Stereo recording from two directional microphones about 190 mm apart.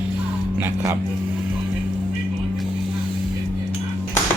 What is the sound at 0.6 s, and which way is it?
Speech, 10° right (ahead or behind).